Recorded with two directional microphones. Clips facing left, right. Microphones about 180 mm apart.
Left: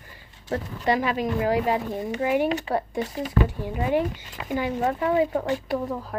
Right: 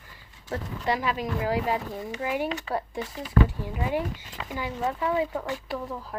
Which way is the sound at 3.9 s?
20° left (ahead or behind).